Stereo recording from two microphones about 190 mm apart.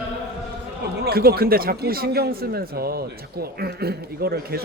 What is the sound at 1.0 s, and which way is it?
A man's voice, 55° right (ahead or behind).